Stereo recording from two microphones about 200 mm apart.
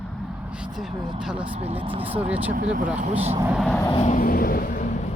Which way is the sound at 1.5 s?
30° right (ahead or behind).